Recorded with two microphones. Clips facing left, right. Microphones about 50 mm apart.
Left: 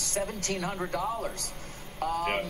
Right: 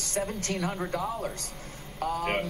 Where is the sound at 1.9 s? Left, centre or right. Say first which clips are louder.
Even; left.